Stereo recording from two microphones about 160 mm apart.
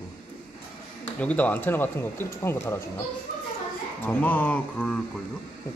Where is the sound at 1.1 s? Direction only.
10° left (ahead or behind).